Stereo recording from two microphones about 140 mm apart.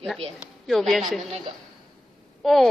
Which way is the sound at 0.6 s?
Centre (ahead or behind).